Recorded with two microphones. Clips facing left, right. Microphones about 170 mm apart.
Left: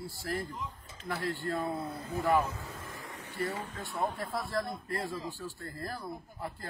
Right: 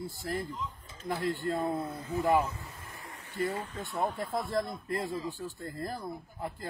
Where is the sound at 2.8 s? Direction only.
90° left.